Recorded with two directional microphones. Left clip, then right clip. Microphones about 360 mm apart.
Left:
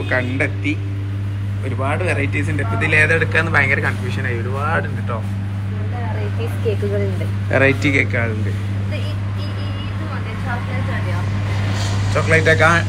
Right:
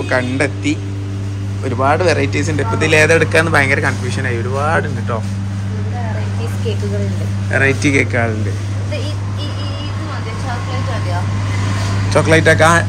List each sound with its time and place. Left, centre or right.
0.1 s speech: centre
1.8 s speech: centre
7.5 s speech: centre
12.1 s speech: centre